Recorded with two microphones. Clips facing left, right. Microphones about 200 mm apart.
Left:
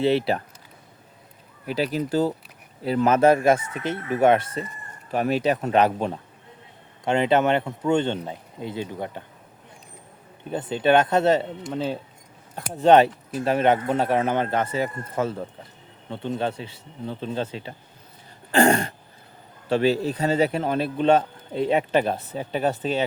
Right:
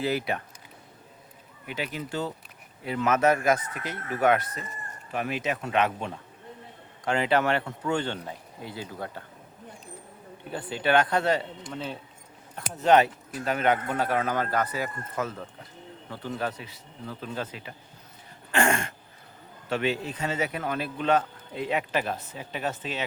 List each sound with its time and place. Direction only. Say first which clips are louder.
0.0 s speech: left 7 dB; 30° left (ahead or behind)
1.6 s speech: left 9 dB; 35° left (ahead or behind)
7.0 s speech: left 5 dB; 25° left (ahead or behind)
10.5 s speech: left 5 dB; 20° left (ahead or behind)
18.5 s throat clearing: left 7 dB; 35° left (ahead or behind)
19.6 s speech: left 7 dB; 35° left (ahead or behind)